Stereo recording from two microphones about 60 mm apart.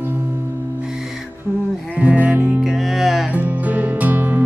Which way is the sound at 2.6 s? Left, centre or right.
Centre.